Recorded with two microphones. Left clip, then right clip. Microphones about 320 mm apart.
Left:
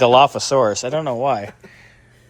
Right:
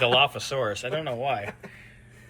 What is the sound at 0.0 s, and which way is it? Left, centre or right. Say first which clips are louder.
Speech: left 9 dB; left.